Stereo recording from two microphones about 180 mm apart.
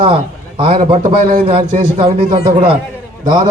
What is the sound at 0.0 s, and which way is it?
A man's voice, 30° right (ahead or behind).